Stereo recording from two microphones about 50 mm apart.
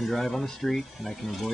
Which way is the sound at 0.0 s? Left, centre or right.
Centre.